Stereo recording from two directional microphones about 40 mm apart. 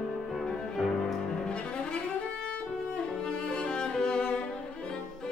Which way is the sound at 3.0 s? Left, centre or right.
Left.